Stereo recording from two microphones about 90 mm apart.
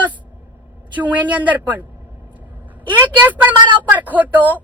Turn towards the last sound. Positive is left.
turn(degrees=-20)  # may be behind; listen again after turning